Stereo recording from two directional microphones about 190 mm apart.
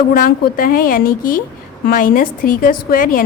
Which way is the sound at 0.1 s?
50° left (ahead or behind).